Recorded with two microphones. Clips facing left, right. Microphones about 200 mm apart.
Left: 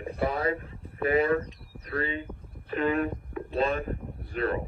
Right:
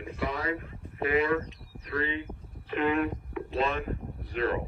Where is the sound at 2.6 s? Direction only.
40° left (ahead or behind).